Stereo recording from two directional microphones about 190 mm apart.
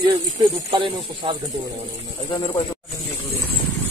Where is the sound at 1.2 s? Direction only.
25° right (ahead or behind).